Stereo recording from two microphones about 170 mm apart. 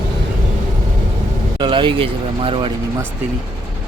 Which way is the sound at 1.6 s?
30° right (ahead or behind).